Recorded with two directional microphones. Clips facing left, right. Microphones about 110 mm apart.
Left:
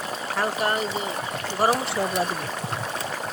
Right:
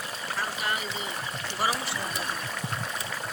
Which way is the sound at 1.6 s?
50° left (ahead or behind).